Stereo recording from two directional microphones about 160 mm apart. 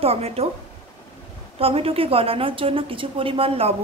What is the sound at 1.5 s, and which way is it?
A woman's voice, 35° right (ahead or behind).